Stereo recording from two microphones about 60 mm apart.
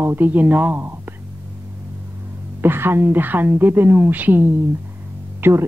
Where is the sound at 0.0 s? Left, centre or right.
Right.